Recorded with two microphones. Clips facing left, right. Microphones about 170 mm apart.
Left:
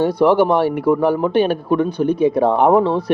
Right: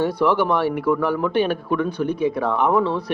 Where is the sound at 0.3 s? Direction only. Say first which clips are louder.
Left 5 dB; 35° left (ahead or behind).